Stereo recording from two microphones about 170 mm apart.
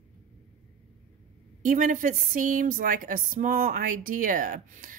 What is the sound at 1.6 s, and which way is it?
Speech, 50° right (ahead or behind).